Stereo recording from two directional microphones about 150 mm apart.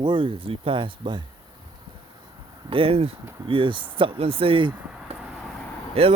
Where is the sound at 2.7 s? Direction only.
40° right (ahead or behind).